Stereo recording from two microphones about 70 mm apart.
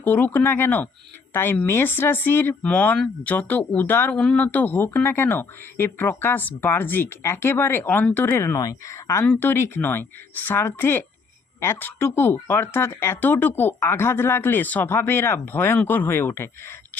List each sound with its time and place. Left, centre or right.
0.0 s speech: left
4.1 s speech: centre
4.4 s speech: left
8.5 s speech: left
9.4 s speech: left